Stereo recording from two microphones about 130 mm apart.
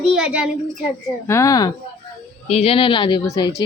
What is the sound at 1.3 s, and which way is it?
Speech, 25° left (ahead or behind).